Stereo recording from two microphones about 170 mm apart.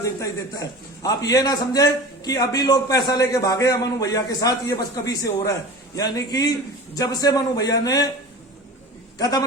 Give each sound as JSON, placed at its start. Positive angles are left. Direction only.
{"t": 0.0, "sound": "a man's voice", "side_deg": 20}
{"t": 9.1, "sound": "a man's voice", "side_deg": 20}